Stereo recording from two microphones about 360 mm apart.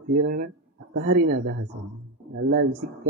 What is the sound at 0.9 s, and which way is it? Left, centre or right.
Speech, right.